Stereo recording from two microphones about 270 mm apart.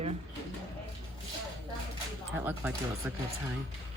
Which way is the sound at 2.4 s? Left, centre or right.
Centre.